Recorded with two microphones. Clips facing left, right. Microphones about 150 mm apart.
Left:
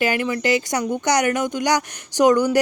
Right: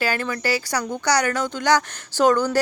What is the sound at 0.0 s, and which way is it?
Speech, 15° left (ahead or behind).